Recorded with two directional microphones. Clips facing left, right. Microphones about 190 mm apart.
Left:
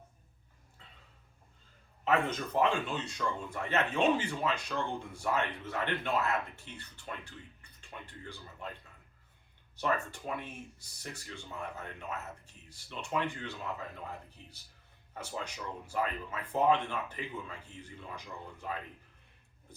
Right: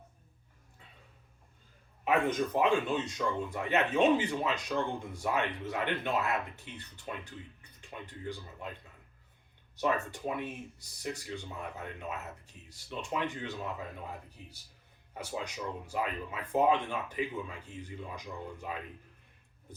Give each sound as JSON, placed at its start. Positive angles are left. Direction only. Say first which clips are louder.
{"t": 2.0, "sound": "speech", "louder": "right 2 dB", "side_deg": -15}
{"t": 9.7, "sound": "speech", "louder": "right 2 dB", "side_deg": -15}
{"t": 15.1, "sound": "speech", "louder": "right 2 dB", "side_deg": -15}